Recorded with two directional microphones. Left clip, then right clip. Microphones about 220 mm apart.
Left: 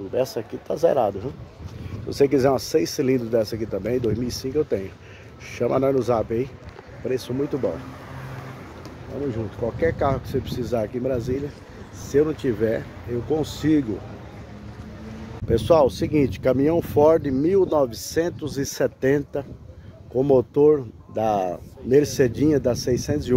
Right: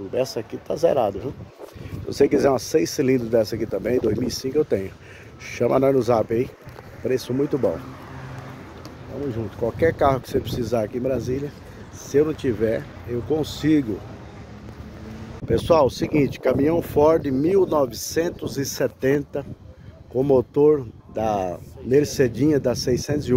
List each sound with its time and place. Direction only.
0.1 s speech: 5° right (ahead or behind); by 7.7 s 35° right (ahead or behind)
9.8 s speech: 50° right (ahead or behind)
10.4 s speech: 30° right (ahead or behind); by 13.8 s 10° right (ahead or behind)
15.4 s speech: centre (ahead or behind)